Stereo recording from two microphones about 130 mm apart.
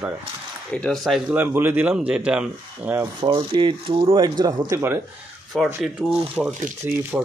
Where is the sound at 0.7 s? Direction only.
5° left (ahead or behind).